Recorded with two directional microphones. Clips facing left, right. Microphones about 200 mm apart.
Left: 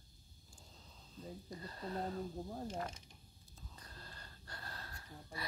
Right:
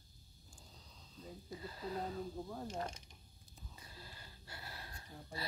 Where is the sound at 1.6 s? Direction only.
5° right (ahead or behind).